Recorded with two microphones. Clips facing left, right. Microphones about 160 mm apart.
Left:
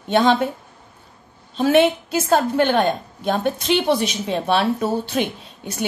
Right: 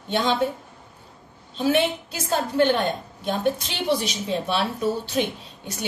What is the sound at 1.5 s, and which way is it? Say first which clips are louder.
A woman's voice: left 6 dB; 60° left (ahead or behind).